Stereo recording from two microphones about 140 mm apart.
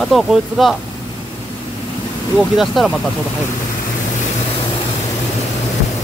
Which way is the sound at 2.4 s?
Centre (ahead or behind).